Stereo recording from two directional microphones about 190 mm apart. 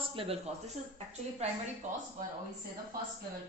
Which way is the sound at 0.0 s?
30° right (ahead or behind).